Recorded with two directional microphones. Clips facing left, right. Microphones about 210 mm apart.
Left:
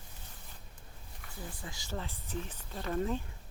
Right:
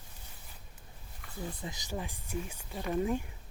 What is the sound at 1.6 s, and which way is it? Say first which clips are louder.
Speech: right 2 dB; 20° right (ahead or behind).